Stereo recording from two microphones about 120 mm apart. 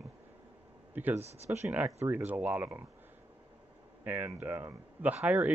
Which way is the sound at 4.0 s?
15° right (ahead or behind).